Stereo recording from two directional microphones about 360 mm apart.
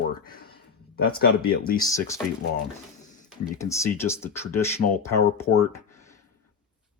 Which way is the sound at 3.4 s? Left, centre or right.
Centre.